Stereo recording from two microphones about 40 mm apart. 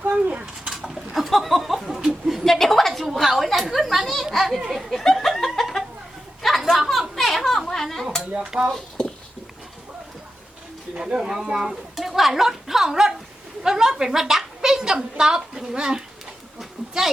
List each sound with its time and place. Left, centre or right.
0.0 s speech: right
0.6 s a sound: centre
4.9 s chuckle: centre
6.4 s a sound: centre
7.2 s children playing: centre
8.5 s speech: centre
10.9 s speech: centre
11.7 s speech: centre
13.6 s a sound: centre